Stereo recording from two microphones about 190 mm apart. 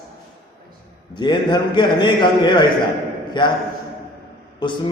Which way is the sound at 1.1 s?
25° left (ahead or behind).